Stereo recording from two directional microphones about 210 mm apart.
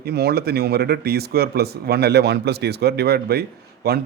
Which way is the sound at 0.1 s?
50° right (ahead or behind).